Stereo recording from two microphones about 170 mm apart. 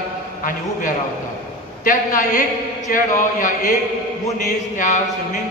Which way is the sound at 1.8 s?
50° left (ahead or behind).